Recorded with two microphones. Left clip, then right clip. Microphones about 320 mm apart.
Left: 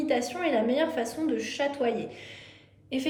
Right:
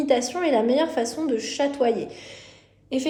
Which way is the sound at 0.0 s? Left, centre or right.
Centre.